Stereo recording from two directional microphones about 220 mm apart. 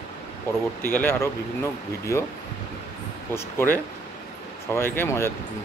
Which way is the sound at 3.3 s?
10° left (ahead or behind).